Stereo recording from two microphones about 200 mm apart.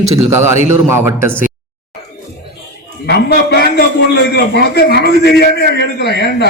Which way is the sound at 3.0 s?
55° left (ahead or behind).